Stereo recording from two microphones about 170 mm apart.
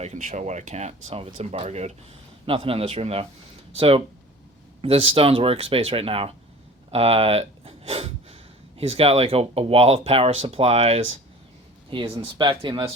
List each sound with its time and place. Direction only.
0.0 s speech: 45° right (ahead or behind)
6.9 s a sound: 35° right (ahead or behind)
8.9 s speech: 35° right (ahead or behind)